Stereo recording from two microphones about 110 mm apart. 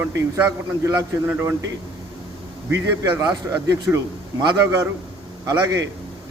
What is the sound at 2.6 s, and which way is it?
Speech, 25° right (ahead or behind).